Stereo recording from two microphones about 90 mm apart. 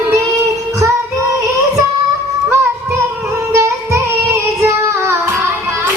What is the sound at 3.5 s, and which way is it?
Music, 35° right (ahead or behind).